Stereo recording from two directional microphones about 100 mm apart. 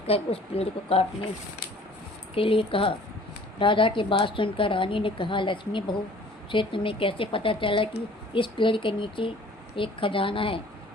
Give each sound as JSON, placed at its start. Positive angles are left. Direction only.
{"t": 0.1, "sound": "speech", "side_deg": 80}
{"t": 2.3, "sound": "a woman's voice", "side_deg": 65}